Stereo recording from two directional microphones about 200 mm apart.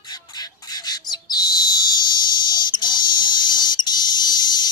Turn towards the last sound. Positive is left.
turn(degrees=20)  # may be behind; listen again after turning